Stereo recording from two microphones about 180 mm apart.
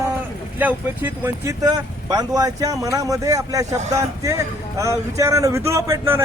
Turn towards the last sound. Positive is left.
turn(degrees=-15)  # may be behind; listen again after turning